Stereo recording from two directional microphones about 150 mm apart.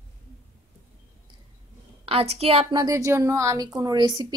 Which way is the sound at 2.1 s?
40° right (ahead or behind).